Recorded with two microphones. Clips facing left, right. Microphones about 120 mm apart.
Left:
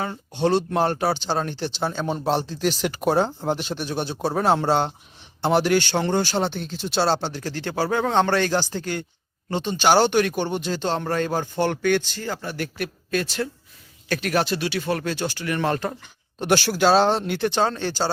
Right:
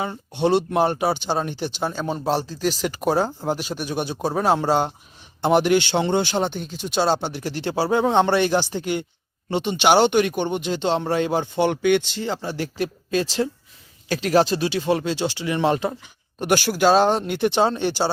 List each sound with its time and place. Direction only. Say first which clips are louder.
0.0 s a man's voice: right 1 dB; 15° right (ahead or behind); by 14.8 s 35° right (ahead or behind)
14.8 s a man's voice: right 5 dB; 20° right (ahead or behind)